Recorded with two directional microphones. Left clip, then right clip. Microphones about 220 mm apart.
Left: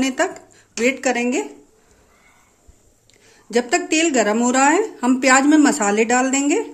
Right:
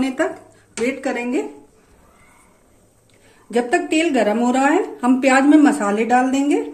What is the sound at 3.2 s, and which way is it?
A woman's voice, 35° left (ahead or behind).